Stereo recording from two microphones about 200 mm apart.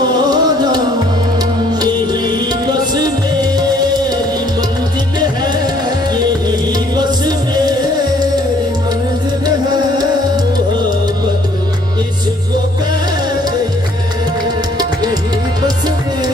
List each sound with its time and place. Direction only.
0.1 s music: 20° right (ahead or behind)
2.9 s music: 20° right (ahead or behind)
7.0 s music: 20° right (ahead or behind)